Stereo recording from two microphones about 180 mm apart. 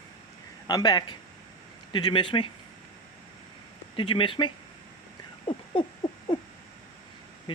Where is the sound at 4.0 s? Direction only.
30° left (ahead or behind).